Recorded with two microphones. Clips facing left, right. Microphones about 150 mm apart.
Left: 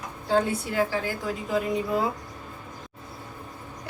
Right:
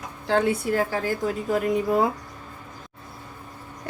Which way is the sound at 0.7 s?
45° right (ahead or behind).